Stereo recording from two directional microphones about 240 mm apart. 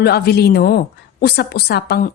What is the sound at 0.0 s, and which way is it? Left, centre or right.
A woman's voice, left.